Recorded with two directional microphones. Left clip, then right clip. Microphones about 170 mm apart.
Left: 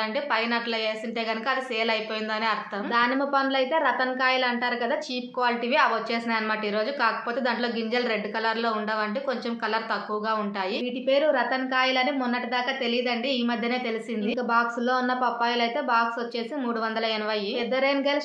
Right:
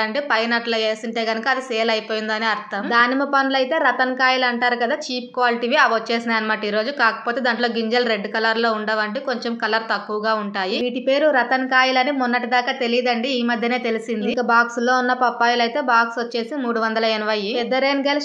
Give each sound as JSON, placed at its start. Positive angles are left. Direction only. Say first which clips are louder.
{"t": 0.3, "sound": "a woman's voice", "louder": "right 7 dB", "side_deg": -35}
{"t": 11.1, "sound": "a woman's voice", "louder": "right 5 dB", "side_deg": -45}